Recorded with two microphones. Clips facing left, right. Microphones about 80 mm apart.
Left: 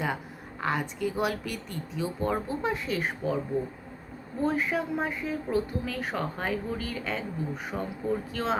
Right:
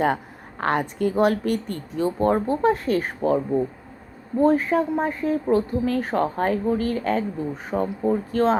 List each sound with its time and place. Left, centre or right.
0.6 s speech: right